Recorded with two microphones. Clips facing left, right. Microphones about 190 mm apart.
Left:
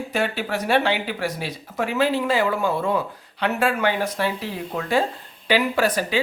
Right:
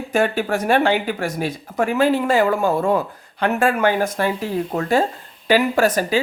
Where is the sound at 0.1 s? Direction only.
50° right (ahead or behind).